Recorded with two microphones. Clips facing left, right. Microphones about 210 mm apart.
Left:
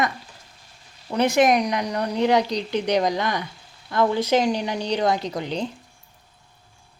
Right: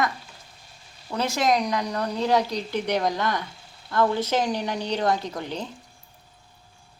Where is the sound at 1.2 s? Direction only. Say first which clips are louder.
Left 5 dB; 15° left (ahead or behind).